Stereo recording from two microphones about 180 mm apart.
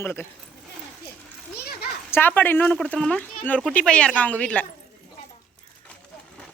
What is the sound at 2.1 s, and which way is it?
Speech, 10° left (ahead or behind).